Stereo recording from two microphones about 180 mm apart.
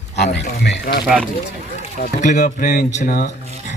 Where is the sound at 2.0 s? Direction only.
45° left (ahead or behind).